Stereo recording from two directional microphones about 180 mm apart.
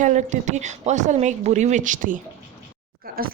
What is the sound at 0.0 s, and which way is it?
A woman's voice, 40° right (ahead or behind).